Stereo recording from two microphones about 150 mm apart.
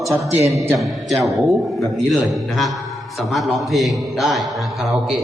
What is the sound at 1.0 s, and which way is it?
A man's voice, centre (ahead or behind).